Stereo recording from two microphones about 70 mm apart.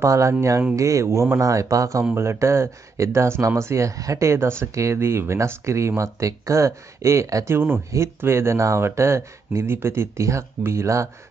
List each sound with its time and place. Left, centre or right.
0.0 s speech: right
2.1 s speech: right
7.5 s speech: right